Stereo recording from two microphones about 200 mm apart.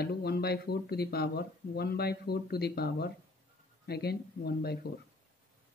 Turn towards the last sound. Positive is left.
turn(degrees=50)  # may be behind; listen again after turning